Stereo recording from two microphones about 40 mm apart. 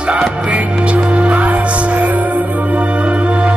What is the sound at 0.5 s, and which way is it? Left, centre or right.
Music, right.